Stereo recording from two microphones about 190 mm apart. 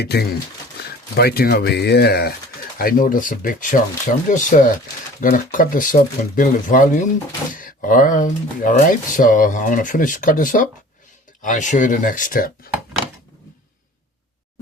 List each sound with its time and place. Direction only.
0.0 s speech: 60° left (ahead or behind)